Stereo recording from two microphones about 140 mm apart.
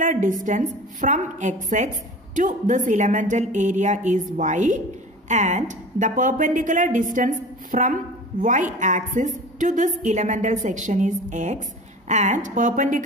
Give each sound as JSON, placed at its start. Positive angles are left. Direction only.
{"t": 0.0, "sound": "a woman's voice", "side_deg": -65}